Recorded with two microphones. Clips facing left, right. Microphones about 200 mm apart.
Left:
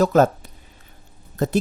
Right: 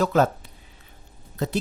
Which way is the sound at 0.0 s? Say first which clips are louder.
Left 4 dB; 45° left (ahead or behind).